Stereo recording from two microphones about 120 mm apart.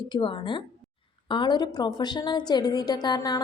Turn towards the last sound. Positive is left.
turn(degrees=35)  # may be behind; listen again after turning